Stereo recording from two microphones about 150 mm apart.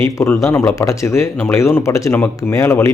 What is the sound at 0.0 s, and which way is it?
Speech, 20° left (ahead or behind).